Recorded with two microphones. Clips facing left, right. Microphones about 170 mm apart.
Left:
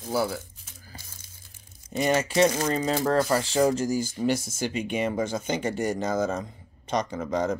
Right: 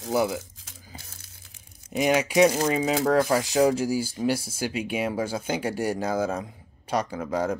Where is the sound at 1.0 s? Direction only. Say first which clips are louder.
Right 1 dB; 70° right (ahead or behind).